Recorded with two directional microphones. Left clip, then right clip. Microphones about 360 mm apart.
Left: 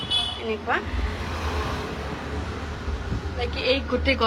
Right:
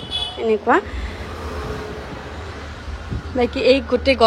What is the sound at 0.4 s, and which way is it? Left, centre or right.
Speech, centre.